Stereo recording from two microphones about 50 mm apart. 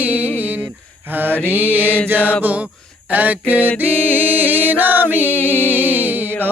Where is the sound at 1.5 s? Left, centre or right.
Right.